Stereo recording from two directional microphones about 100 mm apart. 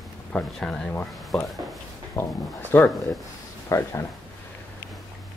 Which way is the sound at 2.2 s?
25° left (ahead or behind).